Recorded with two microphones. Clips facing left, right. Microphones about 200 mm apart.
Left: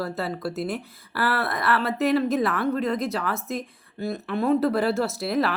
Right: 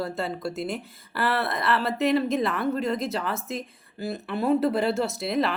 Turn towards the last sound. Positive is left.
turn(degrees=0)  # may be behind; listen again after turning